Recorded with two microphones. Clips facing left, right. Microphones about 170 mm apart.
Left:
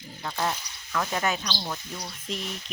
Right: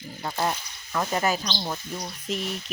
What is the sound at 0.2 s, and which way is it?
Speech, 20° right (ahead or behind).